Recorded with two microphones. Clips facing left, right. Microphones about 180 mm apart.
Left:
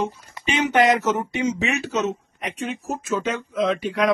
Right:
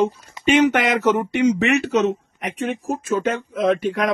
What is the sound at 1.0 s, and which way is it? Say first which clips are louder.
Speech: right 5 dB; 65° right (ahead or behind).